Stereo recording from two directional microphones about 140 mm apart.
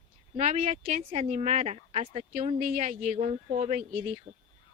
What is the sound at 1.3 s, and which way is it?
Speech, 55° right (ahead or behind).